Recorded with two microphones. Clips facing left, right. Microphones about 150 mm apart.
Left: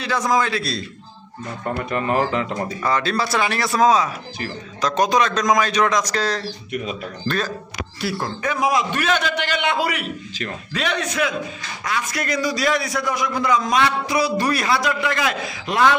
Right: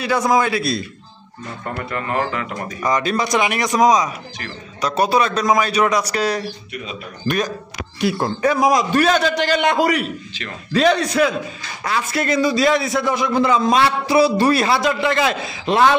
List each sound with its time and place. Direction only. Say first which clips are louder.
0.0 s a man's voice: right 3 dB; 10° right (ahead or behind)
1.6 s speech: left 3 dB; 20° left (ahead or behind)
2.8 s a man's voice: right 3 dB; 15° right (ahead or behind)
8.4 s a man's voice: right 4 dB; 35° right (ahead or behind)